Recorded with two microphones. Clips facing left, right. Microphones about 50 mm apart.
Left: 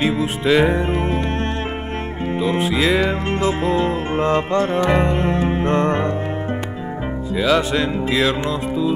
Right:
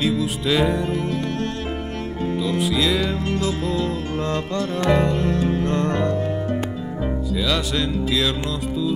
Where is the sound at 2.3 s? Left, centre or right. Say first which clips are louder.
Left 3 dB; left.